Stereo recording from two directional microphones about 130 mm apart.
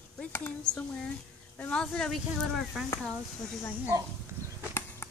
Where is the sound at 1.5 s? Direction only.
10° left (ahead or behind).